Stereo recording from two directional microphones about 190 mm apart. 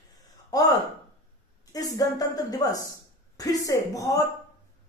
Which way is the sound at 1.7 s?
20° left (ahead or behind).